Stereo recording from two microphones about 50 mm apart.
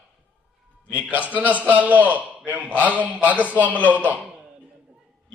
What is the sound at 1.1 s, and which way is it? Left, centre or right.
A man's voice, right.